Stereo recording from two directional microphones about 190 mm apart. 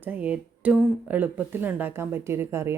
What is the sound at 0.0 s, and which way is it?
Speech, 10° right (ahead or behind).